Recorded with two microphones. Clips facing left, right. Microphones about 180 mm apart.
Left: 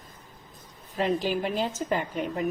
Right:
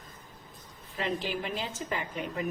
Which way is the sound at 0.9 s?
45° left (ahead or behind).